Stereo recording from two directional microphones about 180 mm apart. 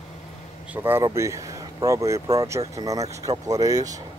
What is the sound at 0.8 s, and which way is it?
Speech, 15° right (ahead or behind).